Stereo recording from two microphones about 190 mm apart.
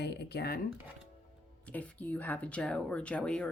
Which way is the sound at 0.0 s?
65° left (ahead or behind).